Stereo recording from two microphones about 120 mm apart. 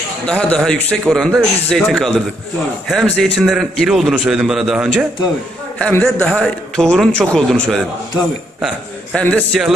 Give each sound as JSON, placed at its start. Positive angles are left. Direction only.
{"t": 0.3, "sound": "a man's voice", "side_deg": 10}
{"t": 9.1, "sound": "a man's voice", "side_deg": 10}